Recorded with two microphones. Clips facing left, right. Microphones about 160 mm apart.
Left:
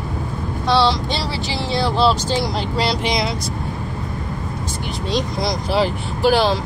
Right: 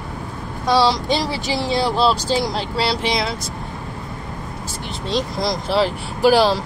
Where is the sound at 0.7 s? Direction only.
10° right (ahead or behind).